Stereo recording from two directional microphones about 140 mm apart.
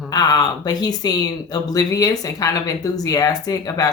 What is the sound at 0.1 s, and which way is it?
Speech, 30° left (ahead or behind).